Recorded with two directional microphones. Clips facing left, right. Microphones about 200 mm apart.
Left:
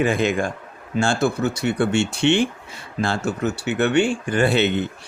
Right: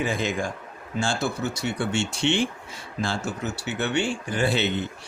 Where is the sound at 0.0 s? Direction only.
60° left (ahead or behind).